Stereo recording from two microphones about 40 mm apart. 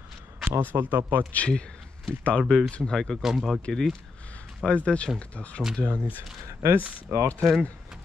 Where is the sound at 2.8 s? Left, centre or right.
Centre.